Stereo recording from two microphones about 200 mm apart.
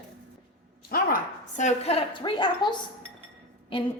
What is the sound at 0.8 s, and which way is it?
A woman's voice, 45° left (ahead or behind).